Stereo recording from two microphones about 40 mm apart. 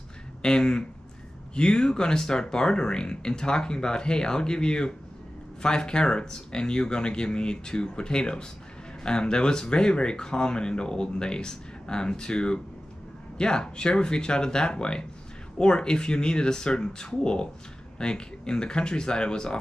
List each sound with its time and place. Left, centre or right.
0.4 s speech: left